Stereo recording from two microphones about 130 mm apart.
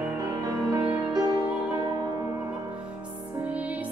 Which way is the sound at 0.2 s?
30° right (ahead or behind).